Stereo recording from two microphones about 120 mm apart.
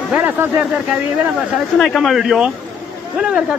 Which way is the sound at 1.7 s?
Centre (ahead or behind).